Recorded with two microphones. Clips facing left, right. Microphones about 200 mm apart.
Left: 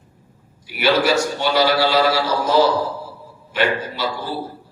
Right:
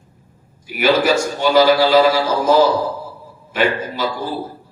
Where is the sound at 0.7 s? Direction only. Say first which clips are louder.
Right 2 dB; 45° right (ahead or behind).